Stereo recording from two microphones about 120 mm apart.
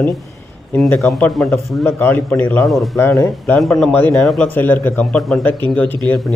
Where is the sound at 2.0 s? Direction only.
15° left (ahead or behind).